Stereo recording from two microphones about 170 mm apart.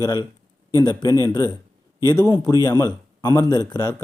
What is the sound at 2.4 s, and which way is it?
A man's voice, 20° left (ahead or behind).